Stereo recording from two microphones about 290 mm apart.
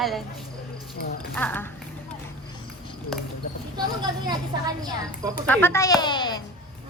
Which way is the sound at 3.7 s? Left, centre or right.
Centre.